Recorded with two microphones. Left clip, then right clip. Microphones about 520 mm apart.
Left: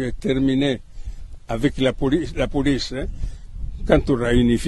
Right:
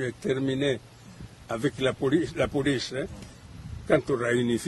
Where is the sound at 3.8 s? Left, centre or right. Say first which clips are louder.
Left 6 dB; left.